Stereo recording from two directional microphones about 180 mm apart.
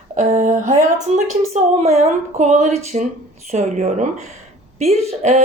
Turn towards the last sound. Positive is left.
turn(degrees=-35)  # may be behind; listen again after turning